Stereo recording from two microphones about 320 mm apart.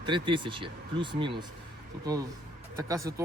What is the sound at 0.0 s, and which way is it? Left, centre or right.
Speech, centre.